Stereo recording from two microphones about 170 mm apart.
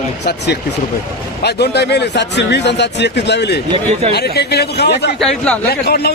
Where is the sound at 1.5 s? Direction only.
75° left (ahead or behind).